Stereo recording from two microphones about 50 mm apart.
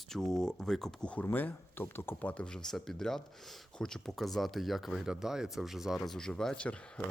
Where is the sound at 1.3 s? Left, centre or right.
Left.